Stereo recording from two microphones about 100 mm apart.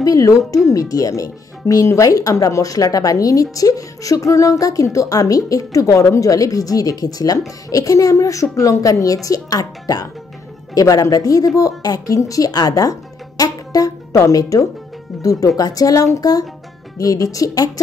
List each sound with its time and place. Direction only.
0.0 s speech: 35° left (ahead or behind)
13.4 s music: 35° left (ahead or behind)
15.2 s speech: 35° left (ahead or behind)